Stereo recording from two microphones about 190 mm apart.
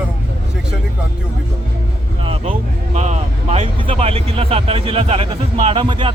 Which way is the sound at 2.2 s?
30° right (ahead or behind).